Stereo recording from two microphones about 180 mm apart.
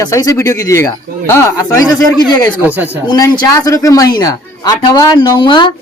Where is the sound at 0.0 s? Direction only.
20° left (ahead or behind).